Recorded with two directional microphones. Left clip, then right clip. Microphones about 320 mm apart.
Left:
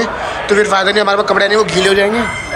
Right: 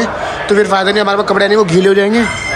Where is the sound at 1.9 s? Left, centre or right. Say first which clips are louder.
Right 1 dB; right.